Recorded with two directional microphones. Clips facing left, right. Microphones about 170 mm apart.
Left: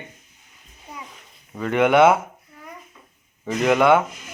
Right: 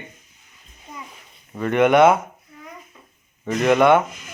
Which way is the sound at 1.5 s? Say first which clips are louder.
Right 1 dB; 5° left (ahead or behind).